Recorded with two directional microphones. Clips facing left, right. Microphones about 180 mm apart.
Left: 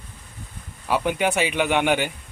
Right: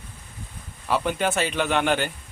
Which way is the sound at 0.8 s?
10° left (ahead or behind).